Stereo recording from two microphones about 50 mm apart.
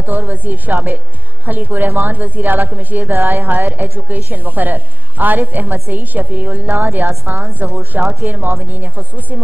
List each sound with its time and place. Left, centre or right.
0.0 s a woman's voice: right